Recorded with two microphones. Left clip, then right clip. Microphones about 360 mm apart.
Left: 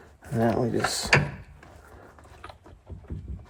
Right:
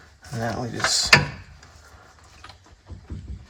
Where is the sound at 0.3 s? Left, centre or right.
Left.